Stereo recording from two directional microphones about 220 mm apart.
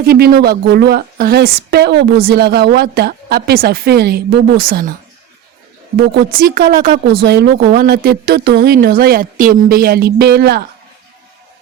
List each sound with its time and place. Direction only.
0.0 s a woman's voice: 45° right (ahead or behind)
6.0 s a woman's voice: 50° right (ahead or behind)